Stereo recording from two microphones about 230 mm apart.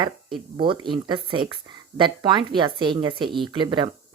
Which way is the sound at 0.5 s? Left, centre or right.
Right.